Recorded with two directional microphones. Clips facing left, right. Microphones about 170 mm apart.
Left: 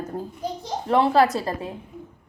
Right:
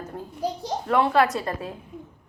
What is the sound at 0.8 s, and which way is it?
Speech, 30° left (ahead or behind).